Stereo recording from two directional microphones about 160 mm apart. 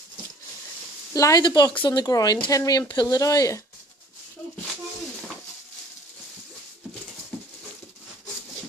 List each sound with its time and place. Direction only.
1.1 s speech: 20° left (ahead or behind)